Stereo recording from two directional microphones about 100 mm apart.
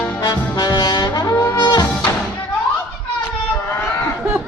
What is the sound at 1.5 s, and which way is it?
Music, 40° left (ahead or behind).